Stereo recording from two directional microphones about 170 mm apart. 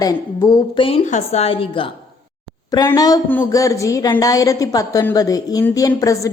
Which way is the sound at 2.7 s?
20° left (ahead or behind).